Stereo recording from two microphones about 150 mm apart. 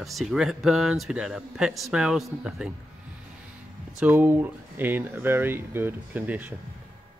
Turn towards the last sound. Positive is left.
turn(degrees=-10)  # may be behind; listen again after turning